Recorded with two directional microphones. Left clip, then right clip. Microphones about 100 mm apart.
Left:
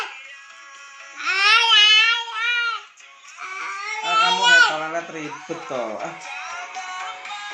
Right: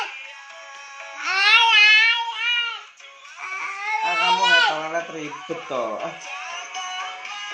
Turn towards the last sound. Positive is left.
turn(degrees=-20)  # may be behind; listen again after turning